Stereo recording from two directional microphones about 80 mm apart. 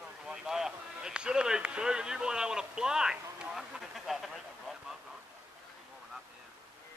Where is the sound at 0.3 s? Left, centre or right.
Centre.